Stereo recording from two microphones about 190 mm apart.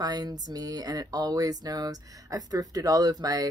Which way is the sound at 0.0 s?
20° right (ahead or behind).